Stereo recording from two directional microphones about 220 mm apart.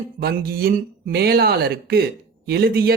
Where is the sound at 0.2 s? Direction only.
45° right (ahead or behind).